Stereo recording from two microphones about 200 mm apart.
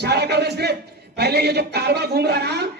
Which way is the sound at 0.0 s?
55° right (ahead or behind).